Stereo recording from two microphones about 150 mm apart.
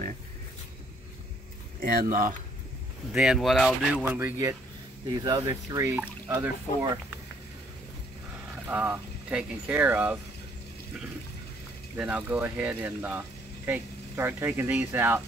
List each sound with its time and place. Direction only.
1.8 s speech: 70° right (ahead or behind)
3.1 s speech: centre (ahead or behind)
4.1 s speech: 15° right (ahead or behind)
8.6 s speech: 15° right (ahead or behind)
12.0 s speech: 10° right (ahead or behind)